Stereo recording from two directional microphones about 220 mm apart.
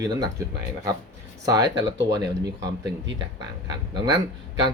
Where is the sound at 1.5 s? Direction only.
20° right (ahead or behind).